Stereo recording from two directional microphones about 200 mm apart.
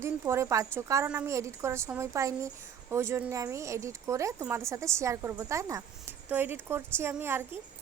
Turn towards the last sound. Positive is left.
turn(degrees=-10)  # may be behind; listen again after turning